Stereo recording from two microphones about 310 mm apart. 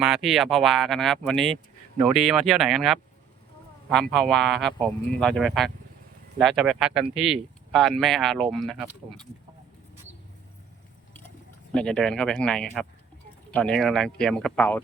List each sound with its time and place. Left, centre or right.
0.0 s speech: centre
11.7 s speech: centre